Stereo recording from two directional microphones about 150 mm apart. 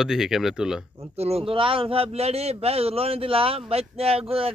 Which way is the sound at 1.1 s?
45° right (ahead or behind).